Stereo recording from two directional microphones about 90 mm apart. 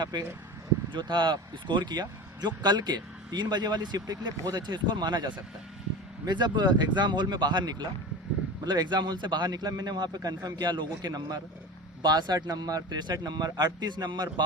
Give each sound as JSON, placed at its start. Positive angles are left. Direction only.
{"t": 0.0, "sound": "speech", "side_deg": -50}